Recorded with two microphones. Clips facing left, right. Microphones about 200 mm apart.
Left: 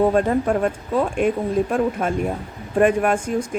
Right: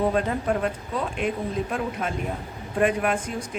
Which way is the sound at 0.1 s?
45° left (ahead or behind).